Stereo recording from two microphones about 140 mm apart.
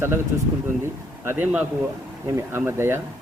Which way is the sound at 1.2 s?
15° right (ahead or behind).